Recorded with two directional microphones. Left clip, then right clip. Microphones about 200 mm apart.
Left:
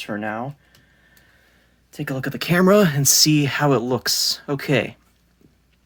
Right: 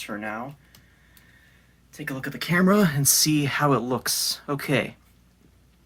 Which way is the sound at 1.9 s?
55° left (ahead or behind).